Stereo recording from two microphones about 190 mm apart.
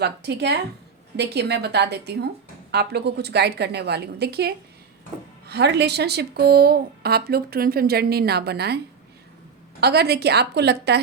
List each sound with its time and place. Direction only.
0.0 s a woman's voice: 60° right (ahead or behind)
9.8 s a woman's voice: 55° right (ahead or behind)